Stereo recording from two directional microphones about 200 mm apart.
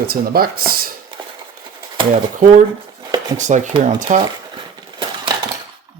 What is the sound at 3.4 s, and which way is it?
Speech, 35° right (ahead or behind).